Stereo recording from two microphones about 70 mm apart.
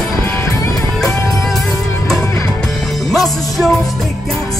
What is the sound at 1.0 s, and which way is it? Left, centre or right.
Music, centre.